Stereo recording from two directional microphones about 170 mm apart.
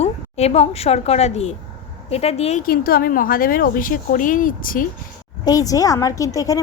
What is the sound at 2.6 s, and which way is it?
Speech, 60° left (ahead or behind).